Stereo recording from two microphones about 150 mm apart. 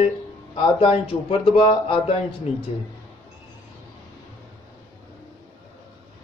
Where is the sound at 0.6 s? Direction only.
35° left (ahead or behind).